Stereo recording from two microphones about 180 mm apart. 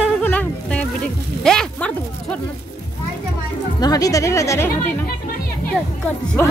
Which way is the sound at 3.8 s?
20° left (ahead or behind).